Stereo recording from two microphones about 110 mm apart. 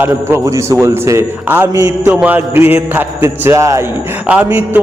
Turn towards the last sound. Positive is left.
turn(degrees=-20)  # may be behind; listen again after turning